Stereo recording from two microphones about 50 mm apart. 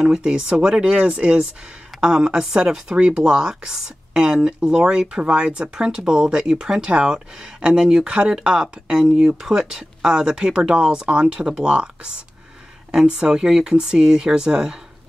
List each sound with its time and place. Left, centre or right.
0.0 s speech: centre